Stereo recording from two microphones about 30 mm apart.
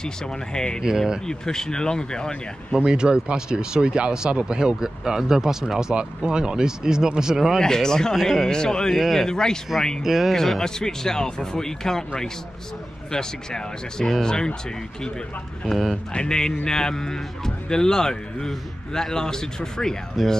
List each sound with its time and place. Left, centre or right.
0.0 s speech: left
0.8 s speech: right
1.2 s speech: left
2.8 s speech: right
4.6 s speech: right
7.6 s speech: left
8.2 s speech: centre
8.5 s speech: left
8.9 s speech: centre
9.2 s speech: left
10.0 s speech: centre
10.3 s speech: centre
13.1 s speech: left
16.1 s speech: left